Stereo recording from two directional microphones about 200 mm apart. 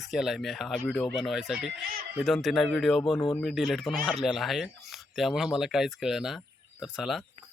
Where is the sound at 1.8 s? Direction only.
50° right (ahead or behind).